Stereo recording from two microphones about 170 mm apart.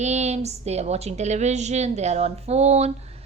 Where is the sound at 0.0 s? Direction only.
45° right (ahead or behind).